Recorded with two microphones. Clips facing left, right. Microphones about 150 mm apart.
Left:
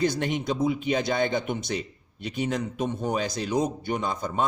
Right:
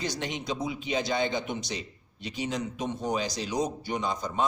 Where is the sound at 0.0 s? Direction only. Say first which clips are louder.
Left 7 dB; 55° left (ahead or behind).